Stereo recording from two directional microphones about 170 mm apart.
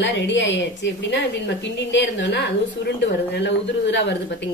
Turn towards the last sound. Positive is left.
turn(degrees=90)